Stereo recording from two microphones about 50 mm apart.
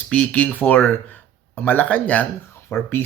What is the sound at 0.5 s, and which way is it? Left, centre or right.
Speech, left.